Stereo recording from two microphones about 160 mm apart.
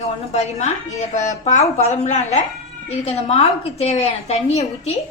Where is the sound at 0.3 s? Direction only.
45° left (ahead or behind).